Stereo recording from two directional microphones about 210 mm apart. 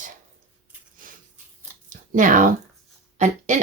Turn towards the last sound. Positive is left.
turn(degrees=-35)  # may be behind; listen again after turning